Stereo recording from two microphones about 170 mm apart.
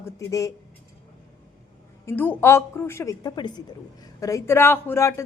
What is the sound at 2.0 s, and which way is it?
A woman's voice, 15° left (ahead or behind).